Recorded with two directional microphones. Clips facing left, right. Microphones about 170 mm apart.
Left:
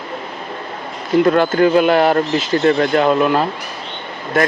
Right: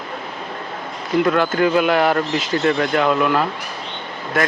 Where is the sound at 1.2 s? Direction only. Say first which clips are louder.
Left 4 dB; 35° left (ahead or behind).